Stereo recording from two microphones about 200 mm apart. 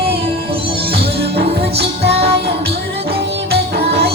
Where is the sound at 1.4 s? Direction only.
30° right (ahead or behind).